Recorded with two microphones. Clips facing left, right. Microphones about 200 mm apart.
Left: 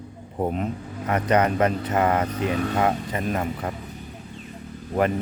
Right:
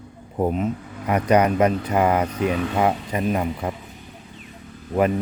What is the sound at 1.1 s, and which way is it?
Speech, 10° right (ahead or behind).